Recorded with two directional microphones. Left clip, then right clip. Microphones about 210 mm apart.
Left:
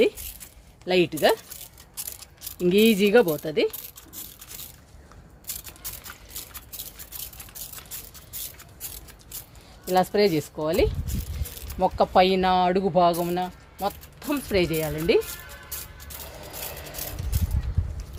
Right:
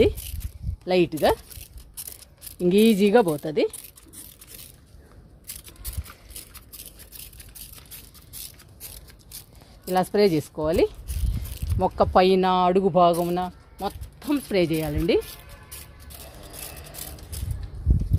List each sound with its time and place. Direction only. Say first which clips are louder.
0.9 s speech: even; 30° right (ahead or behind)
2.6 s speech: even; 30° right (ahead or behind)
9.9 s speech: even; 40° right (ahead or behind)